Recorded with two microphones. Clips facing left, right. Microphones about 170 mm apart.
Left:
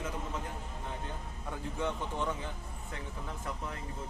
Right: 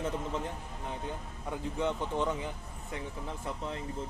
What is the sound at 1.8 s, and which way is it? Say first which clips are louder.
Speech: right 3 dB; 20° right (ahead or behind).